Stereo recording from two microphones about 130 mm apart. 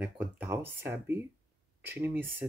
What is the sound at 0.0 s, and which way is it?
Speech, 15° right (ahead or behind).